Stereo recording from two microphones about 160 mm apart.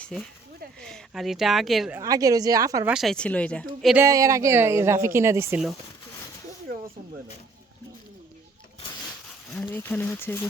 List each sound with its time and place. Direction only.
0.0 s speech: 5° left (ahead or behind)
2.0 s speech: 20° right (ahead or behind)
2.8 s speech: 5° right (ahead or behind)
3.9 s speech: 20° right (ahead or behind)
9.5 s speech: 10° left (ahead or behind)